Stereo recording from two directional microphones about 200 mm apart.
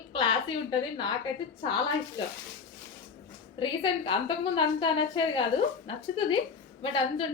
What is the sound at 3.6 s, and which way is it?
A woman's voice, 25° left (ahead or behind).